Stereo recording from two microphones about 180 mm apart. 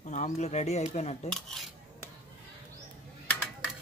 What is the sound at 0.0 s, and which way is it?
Speech, 40° left (ahead or behind).